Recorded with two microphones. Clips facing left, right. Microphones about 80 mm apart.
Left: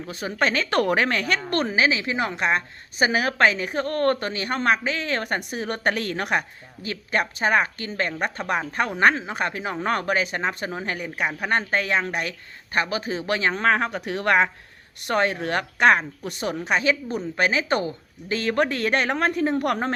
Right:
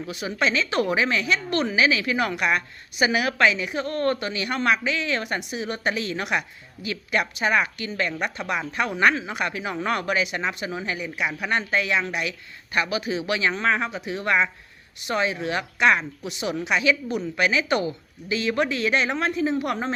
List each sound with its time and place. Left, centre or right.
0.1 s a woman's voice: left